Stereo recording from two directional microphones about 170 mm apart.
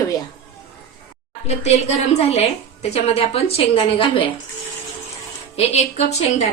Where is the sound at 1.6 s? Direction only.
40° left (ahead or behind).